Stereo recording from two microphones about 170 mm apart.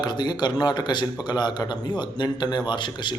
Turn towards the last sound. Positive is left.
turn(degrees=25)  # may be behind; listen again after turning